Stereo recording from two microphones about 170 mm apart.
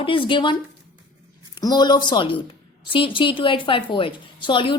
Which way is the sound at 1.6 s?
25° left (ahead or behind).